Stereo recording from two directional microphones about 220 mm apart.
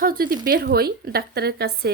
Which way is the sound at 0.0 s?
40° right (ahead or behind).